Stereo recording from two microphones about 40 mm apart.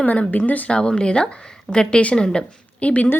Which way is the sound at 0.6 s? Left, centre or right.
Left.